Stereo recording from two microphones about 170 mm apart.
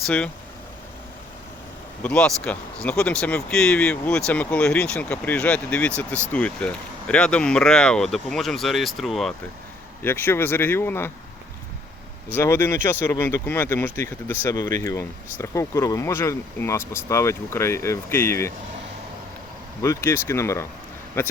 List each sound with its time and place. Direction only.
2.0 s speech: 5° left (ahead or behind)
10.0 s speech: 15° left (ahead or behind)
12.3 s speech: 15° left (ahead or behind)
19.8 s speech: 15° left (ahead or behind)